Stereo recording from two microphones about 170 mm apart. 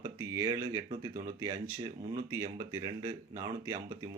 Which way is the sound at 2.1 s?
20° right (ahead or behind).